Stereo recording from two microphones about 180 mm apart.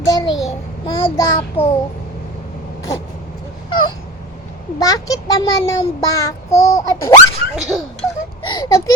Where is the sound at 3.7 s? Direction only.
25° left (ahead or behind).